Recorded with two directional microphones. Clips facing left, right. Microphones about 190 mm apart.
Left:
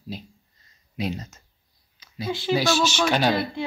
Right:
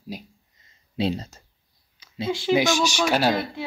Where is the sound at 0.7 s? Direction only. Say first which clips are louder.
Right 4 dB; 30° right (ahead or behind).